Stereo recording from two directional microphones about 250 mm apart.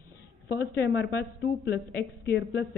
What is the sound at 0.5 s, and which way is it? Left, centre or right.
Speech, left.